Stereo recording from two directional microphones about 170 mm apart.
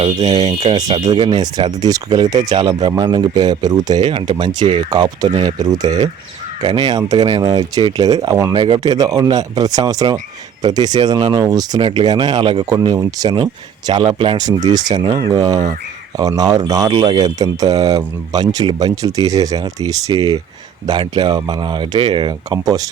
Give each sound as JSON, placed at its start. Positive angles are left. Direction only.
{"t": 0.0, "sound": "speech", "side_deg": -25}
{"t": 4.0, "sound": "speech", "side_deg": -40}
{"t": 4.4, "sound": "speech", "side_deg": -25}